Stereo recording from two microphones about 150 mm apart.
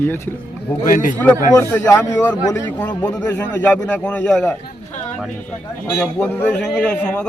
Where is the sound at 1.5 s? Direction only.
15° left (ahead or behind).